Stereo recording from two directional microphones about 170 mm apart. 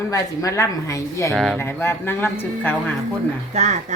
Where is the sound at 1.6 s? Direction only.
15° left (ahead or behind).